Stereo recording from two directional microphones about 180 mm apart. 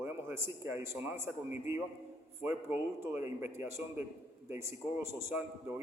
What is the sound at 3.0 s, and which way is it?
A man's voice, 15° right (ahead or behind).